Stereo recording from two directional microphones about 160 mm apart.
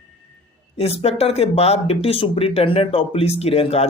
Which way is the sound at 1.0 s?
40° left (ahead or behind).